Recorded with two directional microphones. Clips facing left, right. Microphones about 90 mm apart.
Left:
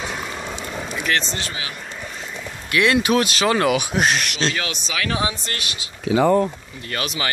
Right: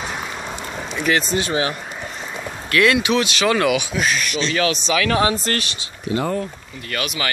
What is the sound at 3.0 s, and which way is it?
Speech, 40° left (ahead or behind).